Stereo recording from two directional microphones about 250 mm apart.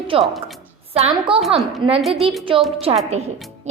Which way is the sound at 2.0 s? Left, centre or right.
Centre.